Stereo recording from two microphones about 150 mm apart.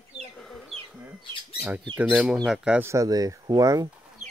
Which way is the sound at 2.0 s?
5° right (ahead or behind).